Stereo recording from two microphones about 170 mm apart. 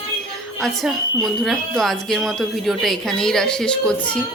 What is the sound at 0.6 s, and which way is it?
Speech, centre (ahead or behind).